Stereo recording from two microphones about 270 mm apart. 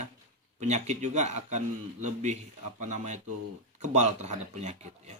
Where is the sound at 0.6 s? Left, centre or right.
Right.